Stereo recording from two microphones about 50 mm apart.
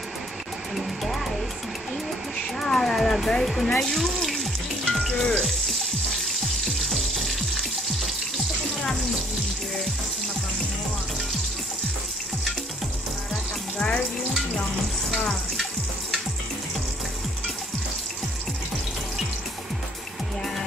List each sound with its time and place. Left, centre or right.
0.7 s vehicle: centre
2.6 s a sound: centre
3.6 s speech: centre
4.8 s frying: centre
13.3 s frying: centre